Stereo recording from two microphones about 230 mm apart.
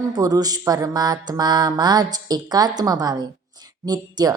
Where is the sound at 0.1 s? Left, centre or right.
Centre.